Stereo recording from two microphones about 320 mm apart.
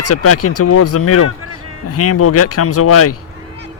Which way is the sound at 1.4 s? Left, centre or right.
Right.